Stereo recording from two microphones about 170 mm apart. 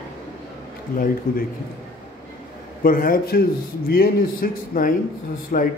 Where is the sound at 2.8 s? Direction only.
55° left (ahead or behind).